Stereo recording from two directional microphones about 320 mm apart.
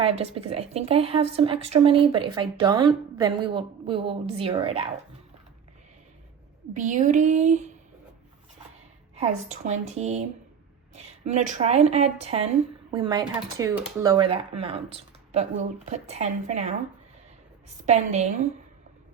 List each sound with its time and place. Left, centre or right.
0.0 s speech: centre
6.7 s a woman's voice: right
9.1 s a woman's voice: right
17.8 s a woman's voice: right